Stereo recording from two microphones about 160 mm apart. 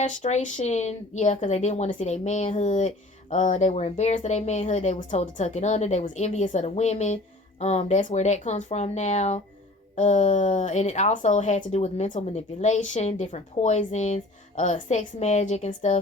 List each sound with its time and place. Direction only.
0.0 s speech: 45° left (ahead or behind)